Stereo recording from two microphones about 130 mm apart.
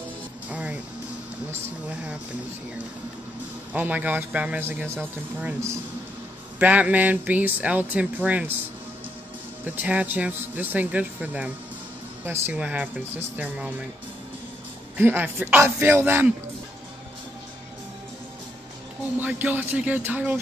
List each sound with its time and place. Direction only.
0.5 s music: 10° right (ahead or behind)
3.7 s speech: 15° right (ahead or behind)
6.6 s speech: 10° right (ahead or behind)
9.7 s speech: 10° right (ahead or behind)
15.0 s speech: 15° right (ahead or behind)
19.1 s speech: 15° right (ahead or behind)